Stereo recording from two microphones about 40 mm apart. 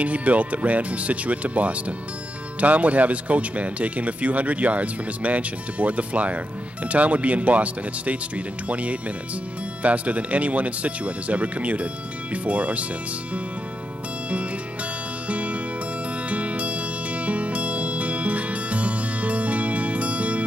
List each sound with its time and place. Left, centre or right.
0.0 s speech: right
15.2 s music: right